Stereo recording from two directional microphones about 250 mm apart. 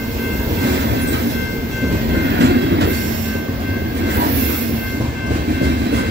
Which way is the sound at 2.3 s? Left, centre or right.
Right.